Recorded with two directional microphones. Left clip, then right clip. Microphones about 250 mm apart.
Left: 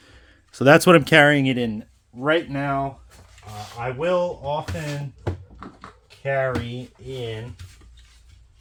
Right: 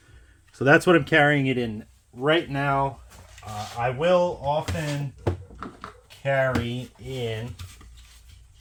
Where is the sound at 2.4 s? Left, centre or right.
Centre.